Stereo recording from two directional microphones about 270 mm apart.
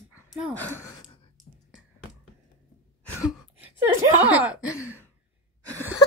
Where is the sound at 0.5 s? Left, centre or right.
Centre.